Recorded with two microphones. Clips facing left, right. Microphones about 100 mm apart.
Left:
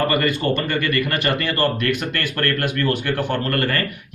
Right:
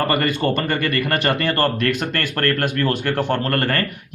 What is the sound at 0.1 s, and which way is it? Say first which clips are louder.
Speech: even; 40° right (ahead or behind).